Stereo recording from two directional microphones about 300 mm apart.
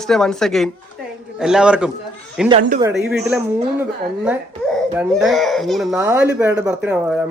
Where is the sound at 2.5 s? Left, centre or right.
Right.